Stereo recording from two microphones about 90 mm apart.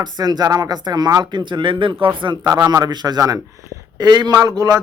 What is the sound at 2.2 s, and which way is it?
Speech, 60° right (ahead or behind).